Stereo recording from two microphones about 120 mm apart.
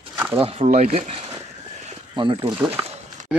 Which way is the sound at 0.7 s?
65° right (ahead or behind).